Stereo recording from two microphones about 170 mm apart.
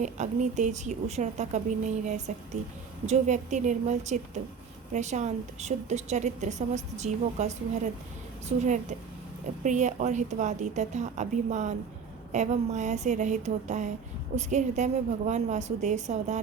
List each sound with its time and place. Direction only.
0.0 s a woman's voice: 45° right (ahead or behind)